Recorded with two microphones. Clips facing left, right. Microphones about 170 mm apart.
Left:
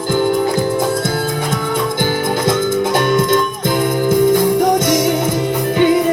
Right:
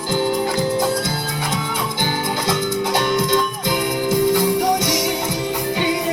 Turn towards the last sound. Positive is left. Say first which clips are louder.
# left 6 dB
turn(degrees=50)  # may be behind; listen again after turning